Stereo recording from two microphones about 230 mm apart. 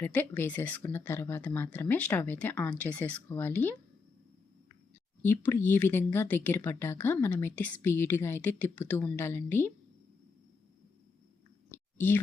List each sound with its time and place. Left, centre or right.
0.0 s speech: centre
5.2 s speech: centre
11.7 s chewing: centre